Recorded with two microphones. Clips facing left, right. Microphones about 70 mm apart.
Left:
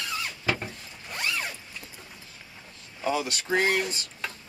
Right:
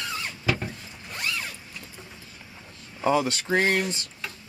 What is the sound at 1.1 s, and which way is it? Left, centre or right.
Mechanisms, centre.